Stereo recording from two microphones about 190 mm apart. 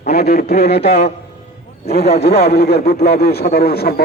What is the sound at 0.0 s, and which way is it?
A man's voice, 55° left (ahead or behind).